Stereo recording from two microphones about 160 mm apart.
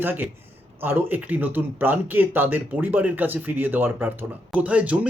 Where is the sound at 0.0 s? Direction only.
10° right (ahead or behind).